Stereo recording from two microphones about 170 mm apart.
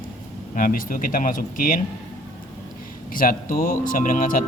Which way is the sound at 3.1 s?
55° left (ahead or behind).